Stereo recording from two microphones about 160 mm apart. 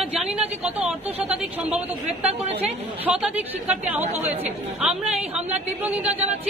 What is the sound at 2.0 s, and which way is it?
Speech, 40° right (ahead or behind).